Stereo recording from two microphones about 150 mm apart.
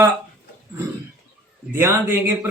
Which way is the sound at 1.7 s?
15° right (ahead or behind).